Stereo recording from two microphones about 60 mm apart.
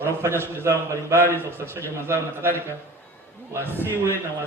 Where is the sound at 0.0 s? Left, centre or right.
Right.